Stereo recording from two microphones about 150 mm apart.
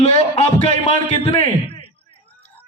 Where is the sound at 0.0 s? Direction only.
45° left (ahead or behind).